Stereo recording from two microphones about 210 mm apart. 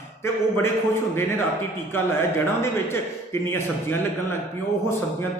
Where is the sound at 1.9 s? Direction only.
10° left (ahead or behind).